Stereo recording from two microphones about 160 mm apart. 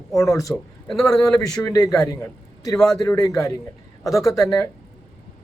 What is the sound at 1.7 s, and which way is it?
Speech, 20° left (ahead or behind).